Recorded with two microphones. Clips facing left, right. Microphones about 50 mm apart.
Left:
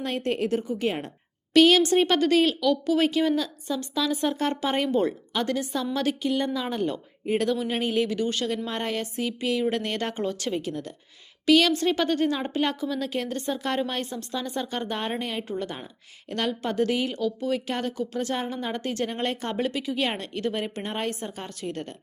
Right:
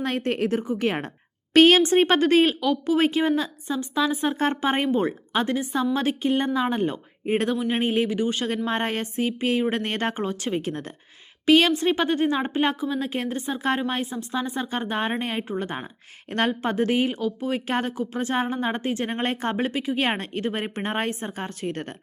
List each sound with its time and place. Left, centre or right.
0.0 s a woman's voice: right
7.5 s a woman's voice: centre
7.8 s a woman's voice: right
8.4 s a woman's voice: right